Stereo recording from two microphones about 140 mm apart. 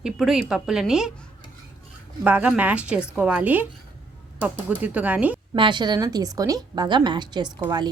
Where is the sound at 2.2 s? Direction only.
10° right (ahead or behind).